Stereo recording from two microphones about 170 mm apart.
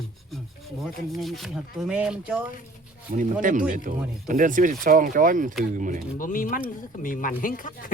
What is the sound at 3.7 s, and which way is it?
Speech, 50° right (ahead or behind).